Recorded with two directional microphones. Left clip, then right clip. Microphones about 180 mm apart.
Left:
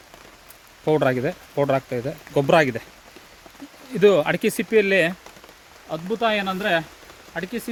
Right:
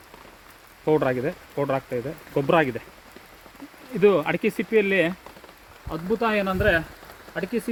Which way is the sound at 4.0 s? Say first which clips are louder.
Left 3 dB; 90° left.